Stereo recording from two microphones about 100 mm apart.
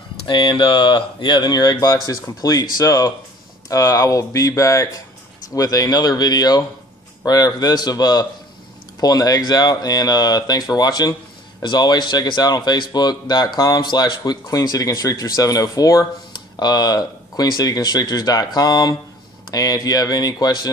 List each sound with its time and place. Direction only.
0.3 s speech: 50° left (ahead or behind)